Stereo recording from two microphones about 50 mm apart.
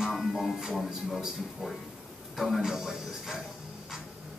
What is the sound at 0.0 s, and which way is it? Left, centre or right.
Speech, centre.